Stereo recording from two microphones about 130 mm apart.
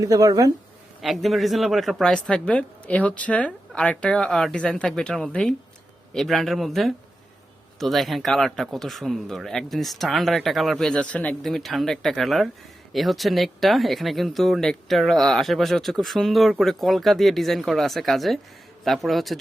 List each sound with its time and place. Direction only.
0.0 s speech: 25° right (ahead or behind)
1.0 s speech: centre (ahead or behind)
11.4 s speech: centre (ahead or behind)